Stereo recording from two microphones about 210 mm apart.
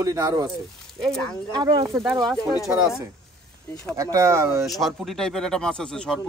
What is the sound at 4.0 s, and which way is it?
Speech, 15° right (ahead or behind).